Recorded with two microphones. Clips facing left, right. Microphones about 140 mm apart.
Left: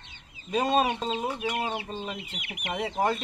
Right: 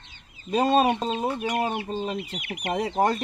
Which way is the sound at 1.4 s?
45° right (ahead or behind).